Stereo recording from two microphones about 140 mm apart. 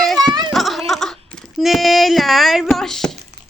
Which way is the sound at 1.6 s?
Centre (ahead or behind).